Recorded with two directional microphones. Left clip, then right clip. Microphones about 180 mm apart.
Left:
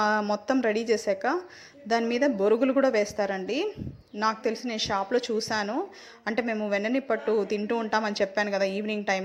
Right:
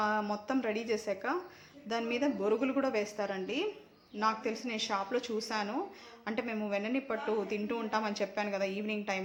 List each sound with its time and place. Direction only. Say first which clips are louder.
0.0 s a woman's voice: left 7 dB; 35° left (ahead or behind)